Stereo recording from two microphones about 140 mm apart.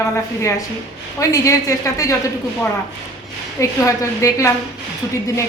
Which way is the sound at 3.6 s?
20° left (ahead or behind).